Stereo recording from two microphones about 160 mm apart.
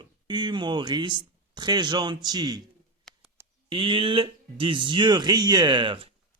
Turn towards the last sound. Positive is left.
turn(degrees=-30)  # may be behind; listen again after turning